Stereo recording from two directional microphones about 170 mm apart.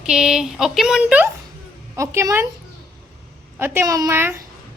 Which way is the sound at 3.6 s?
15° right (ahead or behind).